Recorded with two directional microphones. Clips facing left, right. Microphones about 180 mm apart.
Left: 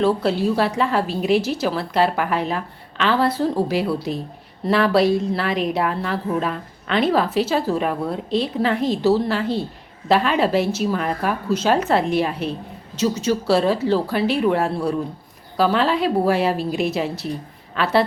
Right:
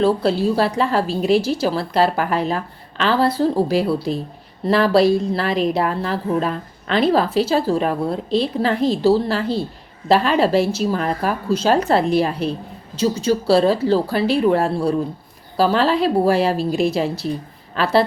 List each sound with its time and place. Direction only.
0.0 s a woman's voice: 30° right (ahead or behind)